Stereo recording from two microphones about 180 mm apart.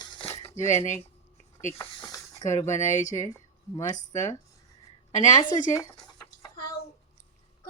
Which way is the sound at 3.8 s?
40° left (ahead or behind).